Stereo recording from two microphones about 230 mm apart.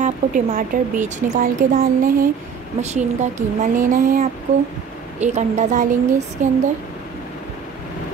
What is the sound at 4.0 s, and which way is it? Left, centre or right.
Speech, right.